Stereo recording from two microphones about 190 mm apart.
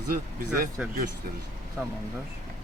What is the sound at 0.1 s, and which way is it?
Speech, 45° right (ahead or behind).